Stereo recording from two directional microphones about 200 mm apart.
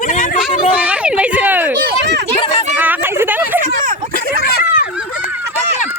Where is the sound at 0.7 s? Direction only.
5° right (ahead or behind).